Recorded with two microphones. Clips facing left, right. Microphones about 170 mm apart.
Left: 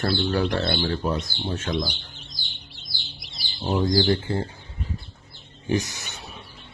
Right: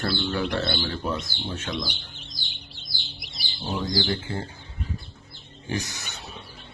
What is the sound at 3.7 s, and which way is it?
Speech, 35° left (ahead or behind).